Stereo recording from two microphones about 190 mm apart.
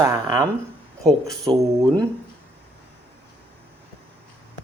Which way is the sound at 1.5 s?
20° right (ahead or behind).